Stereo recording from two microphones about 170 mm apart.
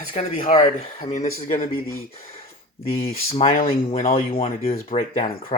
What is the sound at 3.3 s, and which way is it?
Speech, 35° left (ahead or behind).